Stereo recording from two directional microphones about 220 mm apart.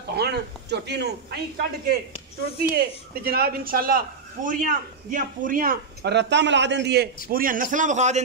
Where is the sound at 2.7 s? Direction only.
45° right (ahead or behind).